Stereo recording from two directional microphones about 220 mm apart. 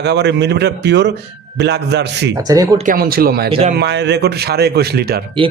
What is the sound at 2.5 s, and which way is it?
Speech, 15° right (ahead or behind).